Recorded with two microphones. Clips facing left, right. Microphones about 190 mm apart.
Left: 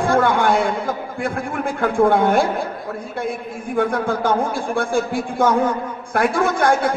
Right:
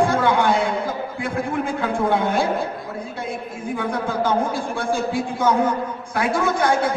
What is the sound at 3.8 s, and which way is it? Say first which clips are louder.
A man's voice: left 5 dB; 55° left (ahead or behind).